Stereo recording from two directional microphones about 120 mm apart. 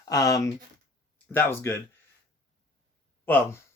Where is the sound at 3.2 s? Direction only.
15° left (ahead or behind).